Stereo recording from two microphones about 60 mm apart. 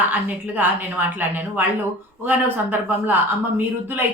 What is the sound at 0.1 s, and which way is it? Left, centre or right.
Speech, right.